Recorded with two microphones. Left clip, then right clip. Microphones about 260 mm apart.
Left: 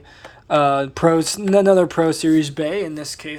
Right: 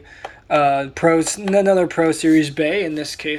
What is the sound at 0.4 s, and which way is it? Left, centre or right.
Speech, left.